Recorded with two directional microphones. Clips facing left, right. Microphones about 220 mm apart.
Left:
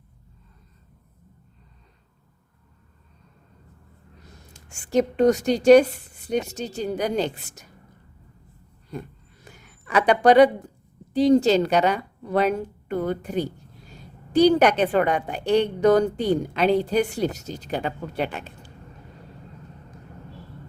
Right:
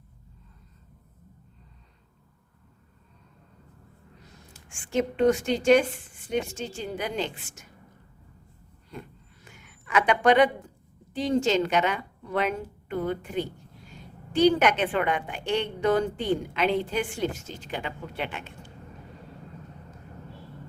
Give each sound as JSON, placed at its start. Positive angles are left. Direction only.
{"t": 4.7, "sound": "a woman's voice", "side_deg": 40}
{"t": 8.9, "sound": "a sound", "side_deg": 40}
{"t": 11.1, "sound": "a woman's voice", "side_deg": 35}